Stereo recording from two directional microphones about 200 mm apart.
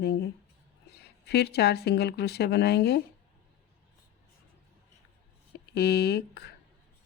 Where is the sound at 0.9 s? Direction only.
55° left (ahead or behind).